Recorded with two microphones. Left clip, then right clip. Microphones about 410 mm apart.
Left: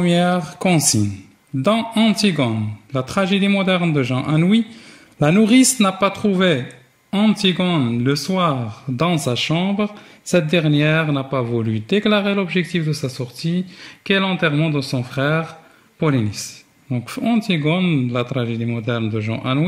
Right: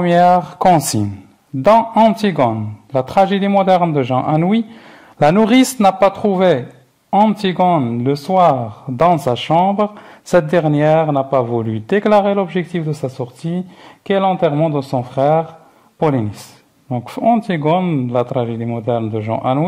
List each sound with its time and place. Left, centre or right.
0.0 s a man's voice: centre